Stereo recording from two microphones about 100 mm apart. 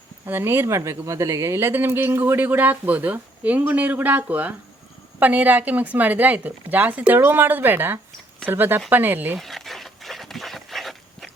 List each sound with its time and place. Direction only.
0.3 s speech: 20° right (ahead or behind)
9.4 s dog: centre (ahead or behind)